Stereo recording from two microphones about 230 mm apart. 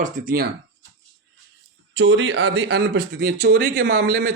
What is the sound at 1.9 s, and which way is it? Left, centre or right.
A man's voice, right.